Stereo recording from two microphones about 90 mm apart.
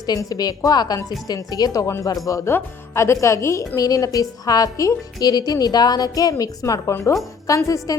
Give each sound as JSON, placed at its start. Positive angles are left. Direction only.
{"t": 0.0, "sound": "a woman's voice", "side_deg": 45}